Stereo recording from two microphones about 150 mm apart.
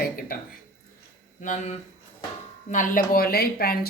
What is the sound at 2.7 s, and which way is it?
A woman's voice, 65° left (ahead or behind).